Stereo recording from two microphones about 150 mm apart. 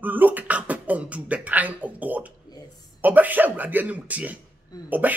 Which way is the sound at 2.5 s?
30° left (ahead or behind).